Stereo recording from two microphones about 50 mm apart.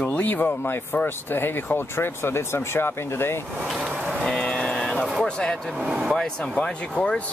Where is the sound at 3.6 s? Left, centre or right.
Centre.